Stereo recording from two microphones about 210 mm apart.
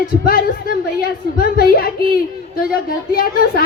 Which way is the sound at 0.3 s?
45° left (ahead or behind).